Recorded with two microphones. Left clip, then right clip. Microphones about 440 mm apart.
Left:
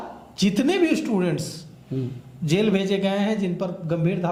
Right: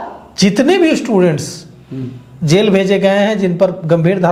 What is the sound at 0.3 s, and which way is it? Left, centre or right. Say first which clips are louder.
A man's voice: right 10 dB; right.